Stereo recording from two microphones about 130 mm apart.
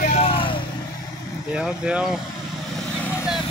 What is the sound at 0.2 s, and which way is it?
Vehicle, 45° left (ahead or behind).